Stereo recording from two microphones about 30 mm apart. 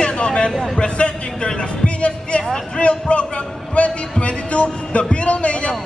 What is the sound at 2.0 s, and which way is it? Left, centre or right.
Music, left.